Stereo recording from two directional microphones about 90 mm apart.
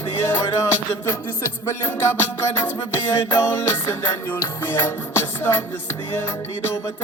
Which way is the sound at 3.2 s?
30° left (ahead or behind).